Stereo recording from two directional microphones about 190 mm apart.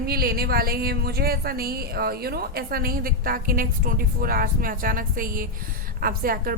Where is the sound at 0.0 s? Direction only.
55° right (ahead or behind).